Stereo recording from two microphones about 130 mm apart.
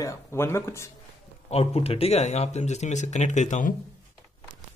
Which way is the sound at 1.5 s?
50° left (ahead or behind).